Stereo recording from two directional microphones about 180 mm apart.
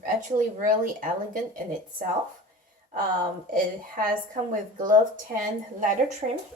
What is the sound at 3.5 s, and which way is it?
Speech, 50° right (ahead or behind).